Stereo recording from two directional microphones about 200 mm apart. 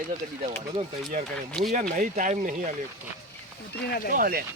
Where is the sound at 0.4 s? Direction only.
30° right (ahead or behind).